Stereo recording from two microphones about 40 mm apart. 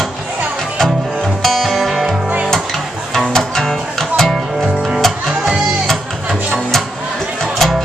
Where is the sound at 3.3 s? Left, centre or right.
Centre.